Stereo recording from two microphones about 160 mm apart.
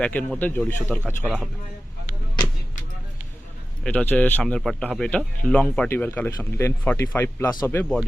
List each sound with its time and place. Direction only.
0.0 s speech: 10° left (ahead or behind)
3.8 s speech: 10° left (ahead or behind)